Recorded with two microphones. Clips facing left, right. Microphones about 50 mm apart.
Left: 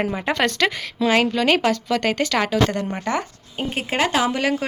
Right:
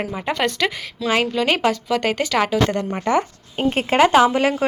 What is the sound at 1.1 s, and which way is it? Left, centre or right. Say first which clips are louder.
Speech: left 1 dB; right.